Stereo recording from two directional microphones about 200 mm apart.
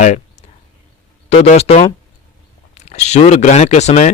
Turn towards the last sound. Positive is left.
turn(degrees=35)  # may be behind; listen again after turning